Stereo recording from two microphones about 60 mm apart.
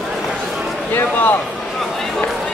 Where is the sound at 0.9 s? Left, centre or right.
Left.